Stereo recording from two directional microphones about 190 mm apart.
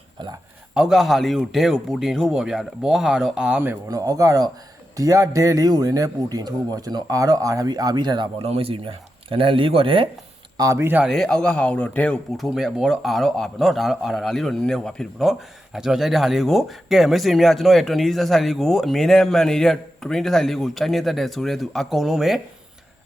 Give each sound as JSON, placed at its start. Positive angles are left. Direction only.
{"t": 0.7, "sound": "a man's voice", "side_deg": -5}
{"t": 10.6, "sound": "speech", "side_deg": -15}